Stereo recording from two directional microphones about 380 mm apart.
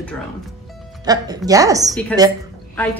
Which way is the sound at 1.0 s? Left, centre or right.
Centre.